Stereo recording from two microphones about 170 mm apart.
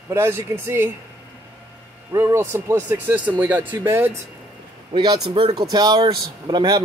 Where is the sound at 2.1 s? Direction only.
15° right (ahead or behind).